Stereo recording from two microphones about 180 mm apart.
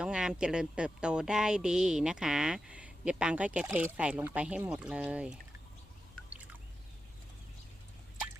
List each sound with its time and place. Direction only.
0.0 s speech: 5° right (ahead or behind)